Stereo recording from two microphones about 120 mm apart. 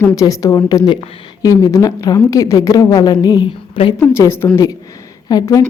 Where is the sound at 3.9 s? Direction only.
20° left (ahead or behind).